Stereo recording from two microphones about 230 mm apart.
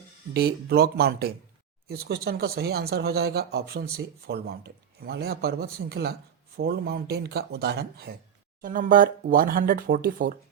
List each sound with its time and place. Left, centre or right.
0.3 s speech: right